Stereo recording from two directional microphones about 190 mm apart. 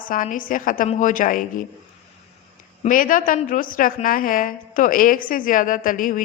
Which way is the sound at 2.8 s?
45° left (ahead or behind).